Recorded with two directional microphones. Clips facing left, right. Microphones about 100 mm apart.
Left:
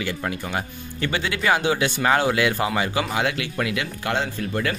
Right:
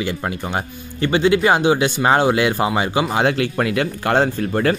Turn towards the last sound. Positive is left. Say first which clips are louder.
# right 7 dB
turn(degrees=-45)  # may be behind; listen again after turning